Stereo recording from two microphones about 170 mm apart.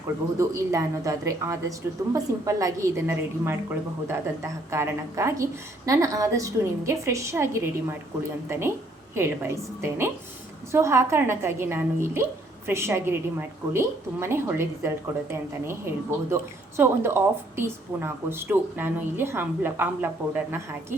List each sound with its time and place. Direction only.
0.3 s speech: 15° right (ahead or behind)